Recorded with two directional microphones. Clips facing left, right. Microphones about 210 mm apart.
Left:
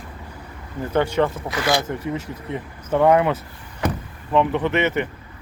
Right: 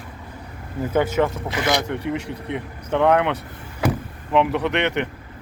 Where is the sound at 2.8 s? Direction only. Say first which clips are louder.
Left 2 dB; 5° left (ahead or behind).